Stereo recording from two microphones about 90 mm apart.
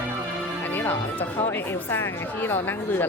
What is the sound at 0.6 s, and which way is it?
Speech, 20° left (ahead or behind).